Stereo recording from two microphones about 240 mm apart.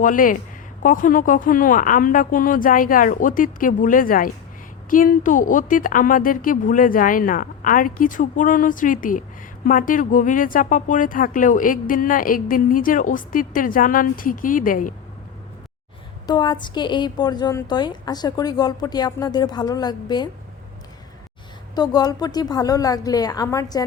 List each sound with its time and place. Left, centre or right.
0.0 s speech: left
16.2 s speech: centre
21.8 s speech: centre